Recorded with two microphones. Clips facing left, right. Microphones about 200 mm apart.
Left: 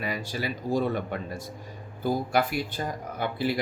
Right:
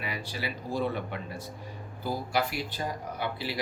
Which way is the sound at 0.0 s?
45° left (ahead or behind).